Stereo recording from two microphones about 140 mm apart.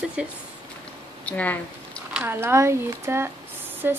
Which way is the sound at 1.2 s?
10° left (ahead or behind).